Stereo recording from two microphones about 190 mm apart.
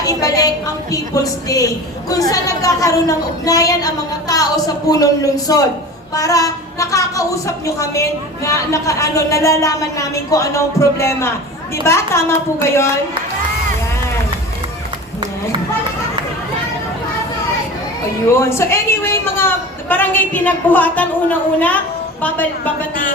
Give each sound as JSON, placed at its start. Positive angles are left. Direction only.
{"t": 0.0, "sound": "a woman's voice", "side_deg": 20}
{"t": 18.3, "sound": "a woman's voice", "side_deg": 15}